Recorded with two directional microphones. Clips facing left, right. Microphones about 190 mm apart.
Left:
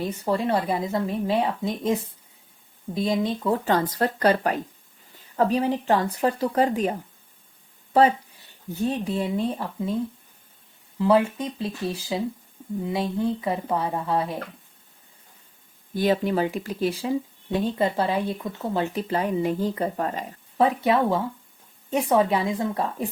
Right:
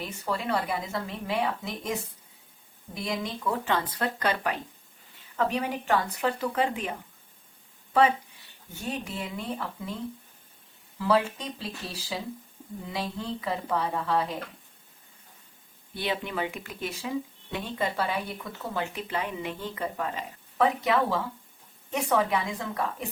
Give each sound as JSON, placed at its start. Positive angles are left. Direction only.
{"t": 0.0, "sound": "a woman's voice", "side_deg": 30}
{"t": 8.7, "sound": "speech", "side_deg": 35}
{"t": 10.9, "sound": "a woman's voice", "side_deg": 25}
{"t": 16.0, "sound": "speech", "side_deg": 40}
{"t": 20.6, "sound": "a woman's voice", "side_deg": 30}